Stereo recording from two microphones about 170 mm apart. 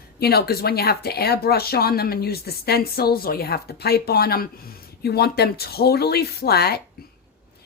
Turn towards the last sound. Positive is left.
turn(degrees=70)  # may be behind; listen again after turning